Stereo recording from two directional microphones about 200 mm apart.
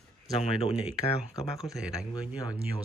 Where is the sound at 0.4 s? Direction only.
30° left (ahead or behind).